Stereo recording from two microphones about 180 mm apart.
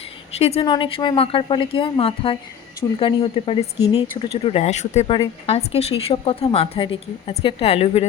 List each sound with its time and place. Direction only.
0.3 s a woman's voice: 35° left (ahead or behind)
4.4 s a woman's voice: 35° left (ahead or behind)